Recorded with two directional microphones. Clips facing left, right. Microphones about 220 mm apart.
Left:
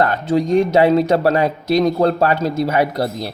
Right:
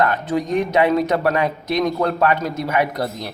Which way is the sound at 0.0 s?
30° left (ahead or behind).